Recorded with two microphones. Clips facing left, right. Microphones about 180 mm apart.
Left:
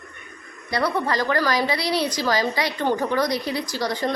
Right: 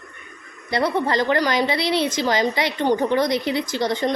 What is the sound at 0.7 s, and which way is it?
A woman's voice, 25° right (ahead or behind).